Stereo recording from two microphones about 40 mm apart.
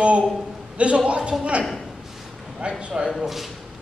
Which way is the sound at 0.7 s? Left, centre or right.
Right.